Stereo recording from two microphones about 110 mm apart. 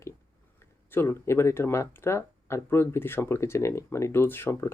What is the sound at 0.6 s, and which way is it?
Speech, 20° left (ahead or behind).